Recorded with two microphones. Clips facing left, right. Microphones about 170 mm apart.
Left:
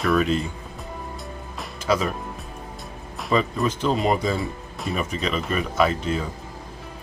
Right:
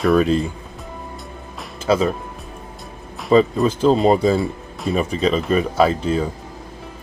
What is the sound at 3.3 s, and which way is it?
Speech, 35° right (ahead or behind).